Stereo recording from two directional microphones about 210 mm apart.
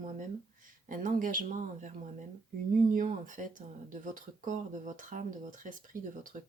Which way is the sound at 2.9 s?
35° right (ahead or behind).